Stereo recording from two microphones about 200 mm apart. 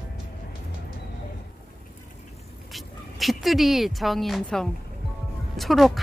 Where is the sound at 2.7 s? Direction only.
Centre (ahead or behind).